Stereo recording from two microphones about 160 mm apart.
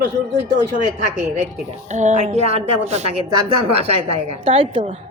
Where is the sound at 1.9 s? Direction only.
50° right (ahead or behind).